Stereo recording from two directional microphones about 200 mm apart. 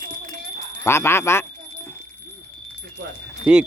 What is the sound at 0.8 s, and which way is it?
Speech, 10° left (ahead or behind).